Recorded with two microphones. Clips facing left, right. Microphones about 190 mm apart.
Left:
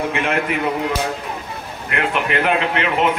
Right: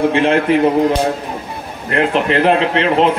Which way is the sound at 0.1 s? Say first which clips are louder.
Right 8 dB; 30° right (ahead or behind).